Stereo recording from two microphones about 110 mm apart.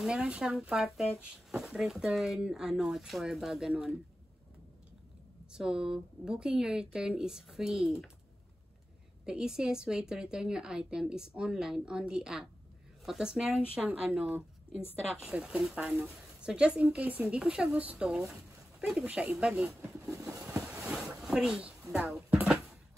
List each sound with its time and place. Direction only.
0.0 s a woman's voice: 10° right (ahead or behind)
5.5 s a woman's voice: 5° right (ahead or behind)
9.2 s a woman's voice: 5° right (ahead or behind)
20.1 s a sound: 30° right (ahead or behind)
20.4 s boat: 10° right (ahead or behind)
20.8 s a sound: 5° right (ahead or behind)